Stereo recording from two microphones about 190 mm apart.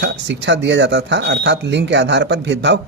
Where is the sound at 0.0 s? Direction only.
70° right (ahead or behind).